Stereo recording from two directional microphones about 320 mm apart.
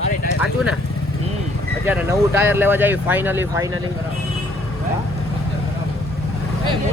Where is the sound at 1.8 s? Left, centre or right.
Centre.